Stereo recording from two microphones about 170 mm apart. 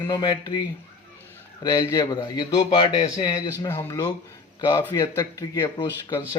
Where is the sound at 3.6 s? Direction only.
15° left (ahead or behind).